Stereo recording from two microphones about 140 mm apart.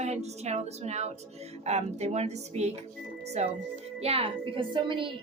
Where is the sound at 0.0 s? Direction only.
55° right (ahead or behind).